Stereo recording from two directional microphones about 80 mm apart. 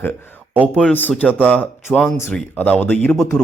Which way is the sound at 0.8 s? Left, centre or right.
Centre.